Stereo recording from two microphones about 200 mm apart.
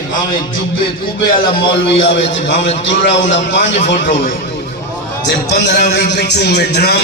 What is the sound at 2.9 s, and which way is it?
Speech, 65° left (ahead or behind).